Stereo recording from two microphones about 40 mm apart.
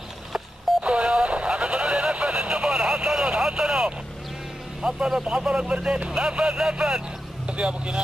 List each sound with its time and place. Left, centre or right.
0.8 s radio: right
4.8 s vehicle: right
5.2 s speech: right